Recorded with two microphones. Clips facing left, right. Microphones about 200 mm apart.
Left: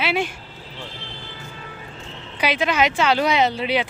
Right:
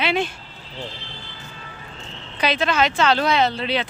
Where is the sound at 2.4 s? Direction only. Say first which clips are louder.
Even; 10° left (ahead or behind).